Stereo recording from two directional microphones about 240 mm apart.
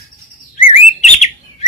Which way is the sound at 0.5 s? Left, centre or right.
Left.